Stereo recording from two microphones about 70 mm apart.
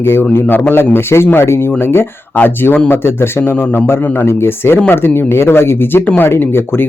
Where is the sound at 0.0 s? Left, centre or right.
Left.